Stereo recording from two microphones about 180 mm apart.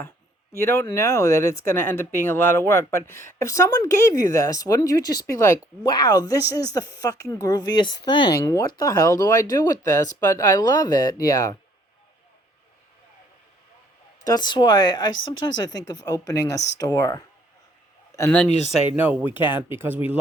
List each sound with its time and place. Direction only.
0.5 s speech: 15° left (ahead or behind)
14.3 s speech: 25° left (ahead or behind)
18.4 s speech: 40° left (ahead or behind)
18.9 s speech: 10° right (ahead or behind)
19.2 s speech: 30° left (ahead or behind)
19.7 s speech: 10° right (ahead or behind)